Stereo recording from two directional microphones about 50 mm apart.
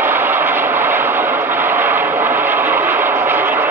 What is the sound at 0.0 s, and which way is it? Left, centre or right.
Vehicle, right.